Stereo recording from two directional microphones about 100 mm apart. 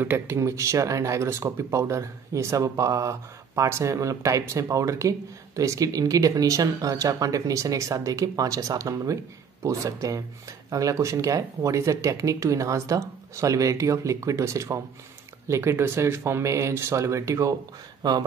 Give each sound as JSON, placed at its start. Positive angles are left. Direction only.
{"t": 0.0, "sound": "speech", "side_deg": -25}